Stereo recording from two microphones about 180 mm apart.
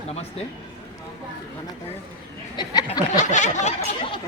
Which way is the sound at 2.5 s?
25° left (ahead or behind).